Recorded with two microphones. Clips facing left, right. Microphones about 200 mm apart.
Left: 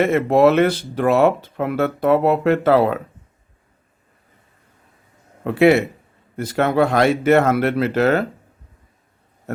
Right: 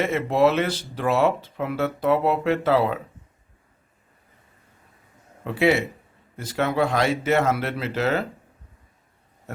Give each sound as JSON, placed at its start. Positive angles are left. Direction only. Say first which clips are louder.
{"t": 0.0, "sound": "speech", "louder": "left 6 dB", "side_deg": 55}
{"t": 5.4, "sound": "speech", "louder": "left 7 dB", "side_deg": 55}